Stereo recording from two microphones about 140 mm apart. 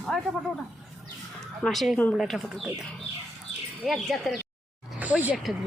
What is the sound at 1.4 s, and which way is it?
Speech, 5° left (ahead or behind).